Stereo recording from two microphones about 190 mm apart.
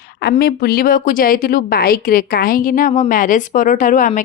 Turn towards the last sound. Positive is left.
turn(degrees=40)  # may be behind; listen again after turning